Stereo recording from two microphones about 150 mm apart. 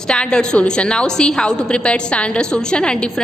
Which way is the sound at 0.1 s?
5° left (ahead or behind).